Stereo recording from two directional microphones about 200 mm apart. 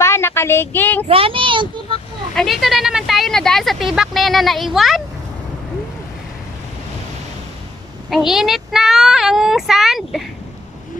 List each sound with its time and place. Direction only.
0.0 s a sound: 10° left (ahead or behind)
1.0 s a child's voice: 30° right (ahead or behind)
2.3 s speech: centre (ahead or behind)
8.1 s speech: centre (ahead or behind)